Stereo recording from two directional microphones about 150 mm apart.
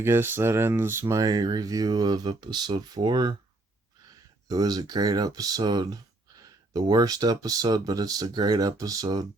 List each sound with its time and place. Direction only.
0.0 s speech: 15° right (ahead or behind)
4.4 s speech: 25° right (ahead or behind)